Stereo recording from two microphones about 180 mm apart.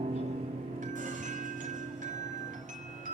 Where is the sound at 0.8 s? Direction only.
45° right (ahead or behind).